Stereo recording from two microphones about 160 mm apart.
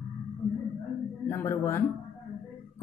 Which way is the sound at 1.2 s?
15° left (ahead or behind).